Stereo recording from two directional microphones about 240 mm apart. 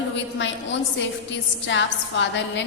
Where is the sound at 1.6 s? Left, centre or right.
Left.